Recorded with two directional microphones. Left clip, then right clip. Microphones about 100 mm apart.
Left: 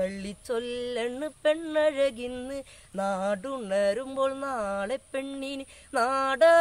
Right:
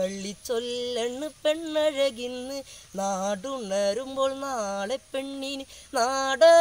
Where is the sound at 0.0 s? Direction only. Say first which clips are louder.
Right 1 dB; 15° right (ahead or behind).